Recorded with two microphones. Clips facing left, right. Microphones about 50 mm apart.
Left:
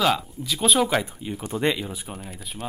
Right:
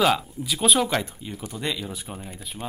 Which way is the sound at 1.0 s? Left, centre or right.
Centre.